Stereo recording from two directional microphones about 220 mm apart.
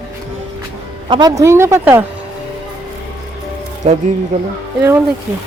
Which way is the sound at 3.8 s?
30° right (ahead or behind).